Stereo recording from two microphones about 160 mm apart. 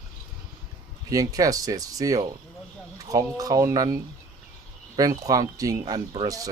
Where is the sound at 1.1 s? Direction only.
20° right (ahead or behind).